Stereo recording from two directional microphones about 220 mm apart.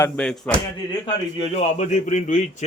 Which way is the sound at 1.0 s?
25° left (ahead or behind).